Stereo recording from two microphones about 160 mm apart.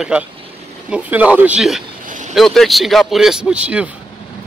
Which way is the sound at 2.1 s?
50° right (ahead or behind).